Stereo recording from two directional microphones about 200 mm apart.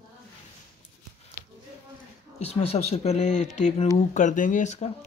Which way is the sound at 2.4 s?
30° left (ahead or behind).